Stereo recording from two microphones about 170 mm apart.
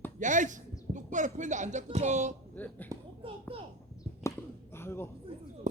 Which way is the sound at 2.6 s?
10° left (ahead or behind).